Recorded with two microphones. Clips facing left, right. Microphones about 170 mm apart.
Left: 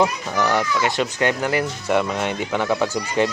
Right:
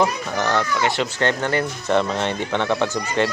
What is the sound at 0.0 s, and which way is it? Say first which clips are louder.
Speech: left 1 dB; 15° left (ahead or behind).